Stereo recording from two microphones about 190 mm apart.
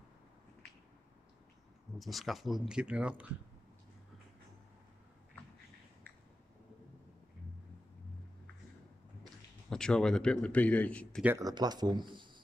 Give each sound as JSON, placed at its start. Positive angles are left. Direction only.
{"t": 2.0, "sound": "a man's voice", "side_deg": 0}
{"t": 9.7, "sound": "a man's voice", "side_deg": 5}
{"t": 11.2, "sound": "speech", "side_deg": -20}